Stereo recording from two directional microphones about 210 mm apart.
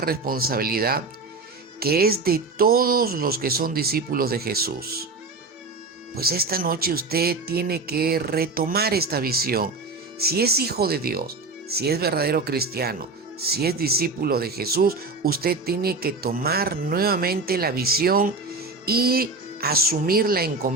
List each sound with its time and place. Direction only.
0.0 s speech: 45° right (ahead or behind)
6.1 s speech: 45° right (ahead or behind)